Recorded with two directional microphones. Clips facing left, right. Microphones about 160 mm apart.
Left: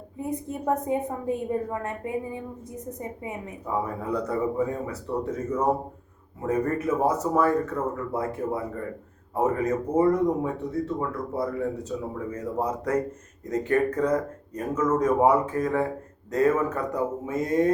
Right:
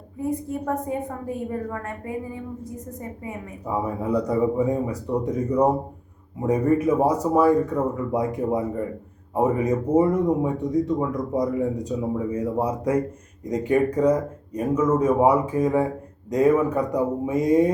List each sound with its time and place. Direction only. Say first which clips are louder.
0.2 s a woman's voice: right 4 dB; 20° left (ahead or behind)
3.8 s speech: right 5 dB; 10° right (ahead or behind)